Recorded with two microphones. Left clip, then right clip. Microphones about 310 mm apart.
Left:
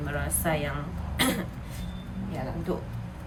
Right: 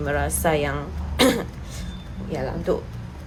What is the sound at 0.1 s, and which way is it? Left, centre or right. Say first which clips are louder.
Speech: right 8 dB; centre.